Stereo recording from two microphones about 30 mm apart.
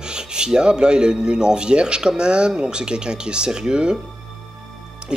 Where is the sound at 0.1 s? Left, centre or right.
Right.